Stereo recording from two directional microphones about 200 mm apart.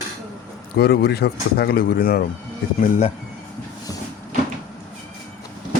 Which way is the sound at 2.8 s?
35° left (ahead or behind).